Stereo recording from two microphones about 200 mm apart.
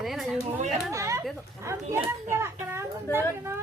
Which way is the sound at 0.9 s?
15° right (ahead or behind).